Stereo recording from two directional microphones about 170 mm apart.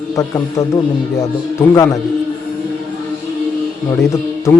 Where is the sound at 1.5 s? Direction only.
15° left (ahead or behind).